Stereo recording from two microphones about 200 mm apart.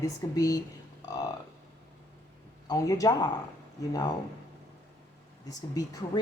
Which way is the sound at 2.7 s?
15° left (ahead or behind).